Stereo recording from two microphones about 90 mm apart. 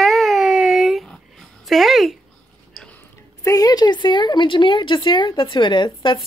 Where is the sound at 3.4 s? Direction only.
40° left (ahead or behind); by 6.2 s 60° left (ahead or behind).